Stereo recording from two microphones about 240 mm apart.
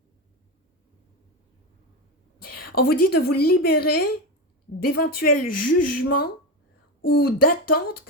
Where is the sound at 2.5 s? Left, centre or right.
Left.